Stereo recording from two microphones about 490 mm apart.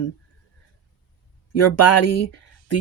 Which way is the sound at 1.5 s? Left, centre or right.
Left.